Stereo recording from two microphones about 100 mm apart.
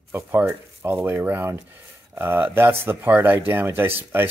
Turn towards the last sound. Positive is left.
turn(degrees=-20)  # may be behind; listen again after turning